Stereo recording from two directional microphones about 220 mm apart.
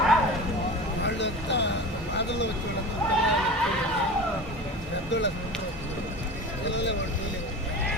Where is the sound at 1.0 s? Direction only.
55° left (ahead or behind).